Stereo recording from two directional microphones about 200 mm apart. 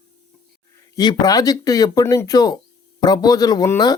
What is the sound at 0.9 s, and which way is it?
A man's voice, 20° left (ahead or behind).